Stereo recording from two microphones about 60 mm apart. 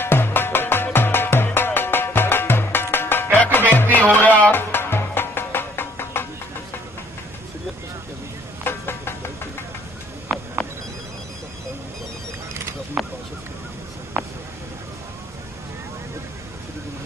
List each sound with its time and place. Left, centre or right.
0.0 s music: left
4.5 s music: left
8.6 s vehicle: left
13.0 s a sound: centre